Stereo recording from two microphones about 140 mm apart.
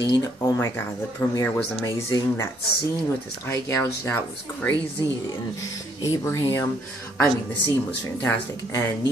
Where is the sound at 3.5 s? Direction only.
20° left (ahead or behind).